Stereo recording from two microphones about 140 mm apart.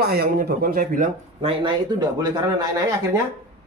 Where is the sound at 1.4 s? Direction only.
35° right (ahead or behind).